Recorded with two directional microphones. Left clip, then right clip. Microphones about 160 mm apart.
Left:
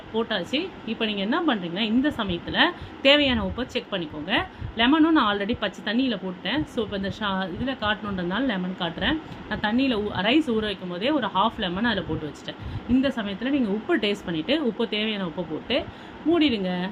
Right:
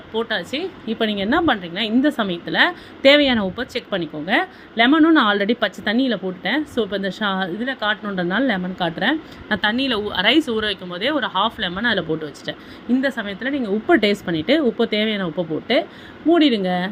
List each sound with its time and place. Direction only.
0.1 s speech: 35° right (ahead or behind)